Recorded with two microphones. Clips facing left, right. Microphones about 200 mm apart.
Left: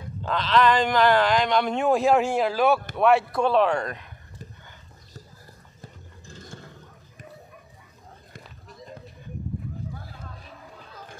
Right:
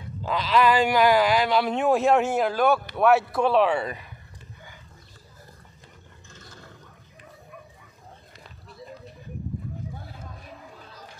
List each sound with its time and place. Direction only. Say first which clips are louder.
0.2 s speech: even; 10° right (ahead or behind)
5.8 s roar: left 4 dB; 35° left (ahead or behind)